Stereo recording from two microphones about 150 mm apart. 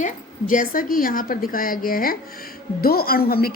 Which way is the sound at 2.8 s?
85° left.